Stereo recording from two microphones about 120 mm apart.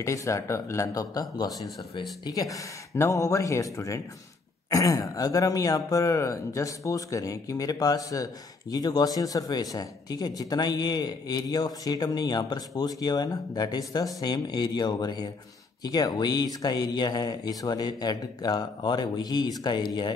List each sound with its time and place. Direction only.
0.0 s speech: 25° left (ahead or behind)